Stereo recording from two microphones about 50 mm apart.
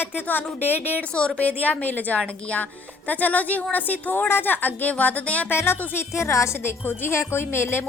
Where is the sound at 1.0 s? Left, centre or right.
Centre.